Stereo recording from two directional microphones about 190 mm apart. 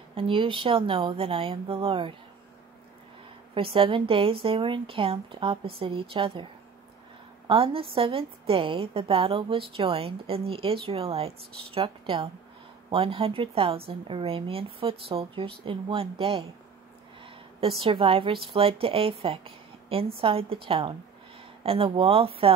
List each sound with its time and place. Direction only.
0.1 s a woman's voice: 30° right (ahead or behind)
3.5 s a woman's voice: 30° right (ahead or behind)
7.4 s a woman's voice: 30° right (ahead or behind)